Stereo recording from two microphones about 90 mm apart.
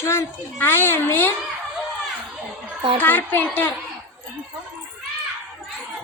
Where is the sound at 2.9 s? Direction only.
20° left (ahead or behind).